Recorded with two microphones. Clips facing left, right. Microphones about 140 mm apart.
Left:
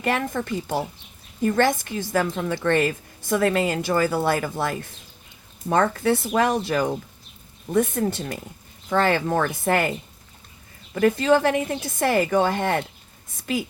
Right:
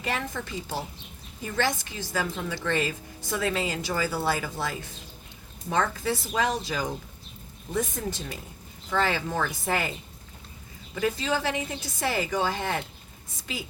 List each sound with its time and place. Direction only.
0.0 s a woman's voice: 55° left (ahead or behind)
10.9 s a woman's voice: 55° left (ahead or behind)